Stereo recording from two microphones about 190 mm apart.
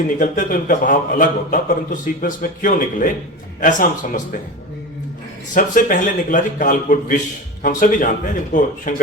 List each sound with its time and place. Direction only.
0.2 s a man's voice: 45° left (ahead or behind)
5.5 s a man's voice: 45° left (ahead or behind)